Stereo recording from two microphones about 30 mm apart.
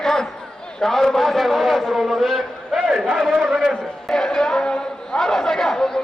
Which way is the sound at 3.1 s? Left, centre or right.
Centre.